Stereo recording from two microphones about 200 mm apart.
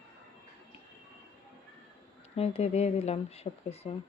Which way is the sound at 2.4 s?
30° left (ahead or behind).